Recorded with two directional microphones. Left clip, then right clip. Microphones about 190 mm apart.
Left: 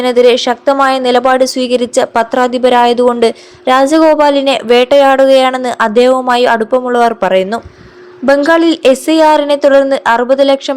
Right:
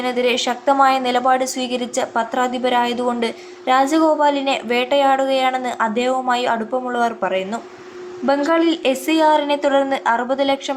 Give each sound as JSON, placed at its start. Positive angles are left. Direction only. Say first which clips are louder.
{"t": 0.0, "sound": "a woman's voice", "louder": "left 11 dB", "side_deg": 35}